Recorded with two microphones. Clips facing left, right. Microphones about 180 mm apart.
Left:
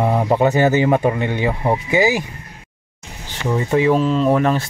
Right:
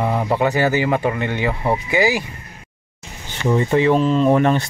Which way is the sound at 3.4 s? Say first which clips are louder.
Right 1 dB; 5° left (ahead or behind).